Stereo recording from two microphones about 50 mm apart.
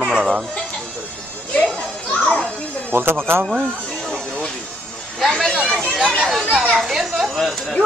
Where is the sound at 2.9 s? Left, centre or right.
Right.